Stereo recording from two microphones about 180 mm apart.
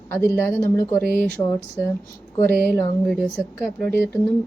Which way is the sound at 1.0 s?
65° right (ahead or behind).